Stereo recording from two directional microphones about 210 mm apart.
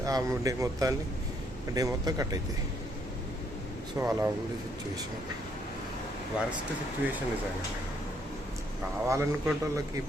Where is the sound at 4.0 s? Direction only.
15° right (ahead or behind).